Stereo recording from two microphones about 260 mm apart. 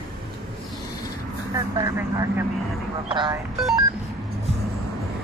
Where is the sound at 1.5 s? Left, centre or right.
Centre.